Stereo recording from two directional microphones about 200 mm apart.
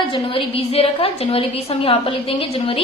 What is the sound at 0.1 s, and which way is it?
A woman's voice, 25° left (ahead or behind).